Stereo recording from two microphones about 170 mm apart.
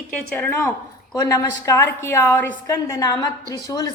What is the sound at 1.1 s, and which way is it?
A woman's voice, 20° left (ahead or behind).